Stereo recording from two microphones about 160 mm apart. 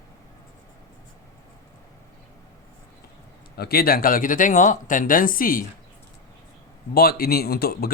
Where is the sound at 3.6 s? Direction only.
75° left (ahead or behind).